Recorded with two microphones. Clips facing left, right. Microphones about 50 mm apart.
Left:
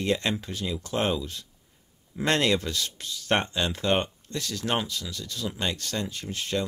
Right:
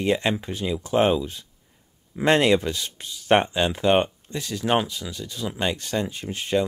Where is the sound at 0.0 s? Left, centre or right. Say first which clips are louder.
Right 4 dB; centre.